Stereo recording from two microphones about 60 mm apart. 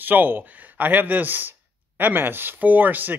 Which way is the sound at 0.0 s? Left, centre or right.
Right.